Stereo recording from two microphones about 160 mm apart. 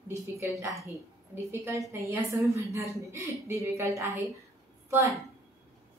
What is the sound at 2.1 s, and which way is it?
A woman's voice, 20° right (ahead or behind).